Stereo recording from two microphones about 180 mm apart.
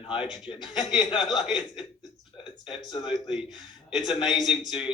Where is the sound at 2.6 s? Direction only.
25° left (ahead or behind).